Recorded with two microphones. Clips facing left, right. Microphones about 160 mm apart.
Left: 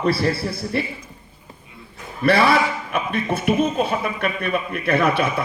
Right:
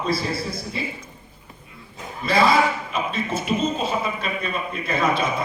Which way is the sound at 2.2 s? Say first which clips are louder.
Left 2 dB; 65° left (ahead or behind).